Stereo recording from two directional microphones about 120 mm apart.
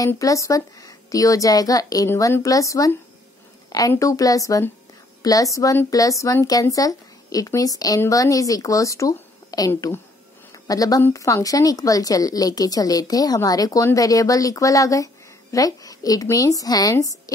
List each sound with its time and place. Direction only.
0.2 s speech: 30° left (ahead or behind)